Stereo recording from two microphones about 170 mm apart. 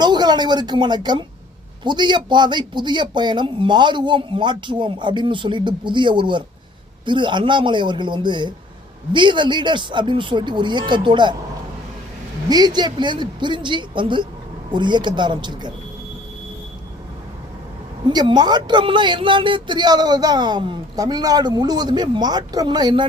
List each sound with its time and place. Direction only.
0.0 s speech: 25° right (ahead or behind)
12.5 s speech: 25° right (ahead or behind)
18.0 s speech: 25° right (ahead or behind)